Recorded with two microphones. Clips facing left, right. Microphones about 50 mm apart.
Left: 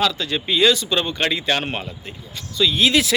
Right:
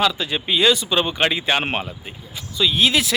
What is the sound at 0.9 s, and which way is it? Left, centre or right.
Speech, centre.